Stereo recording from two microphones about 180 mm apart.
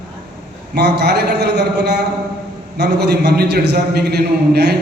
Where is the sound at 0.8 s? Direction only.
65° right (ahead or behind).